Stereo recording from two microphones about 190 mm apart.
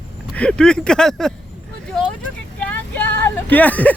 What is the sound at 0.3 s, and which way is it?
Speech, 5° left (ahead or behind).